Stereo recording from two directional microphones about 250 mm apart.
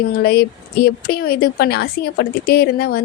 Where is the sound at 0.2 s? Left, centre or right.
Left.